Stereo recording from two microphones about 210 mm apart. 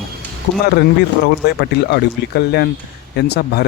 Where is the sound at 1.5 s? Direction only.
50° left (ahead or behind).